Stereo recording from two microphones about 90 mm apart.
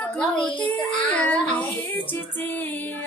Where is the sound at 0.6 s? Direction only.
15° left (ahead or behind).